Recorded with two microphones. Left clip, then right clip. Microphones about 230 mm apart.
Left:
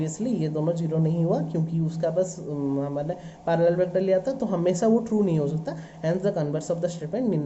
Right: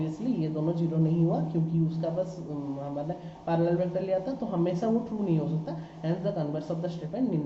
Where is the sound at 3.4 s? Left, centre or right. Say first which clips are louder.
Left 6 dB; left.